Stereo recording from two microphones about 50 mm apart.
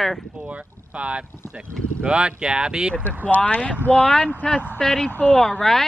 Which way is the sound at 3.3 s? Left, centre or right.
Left.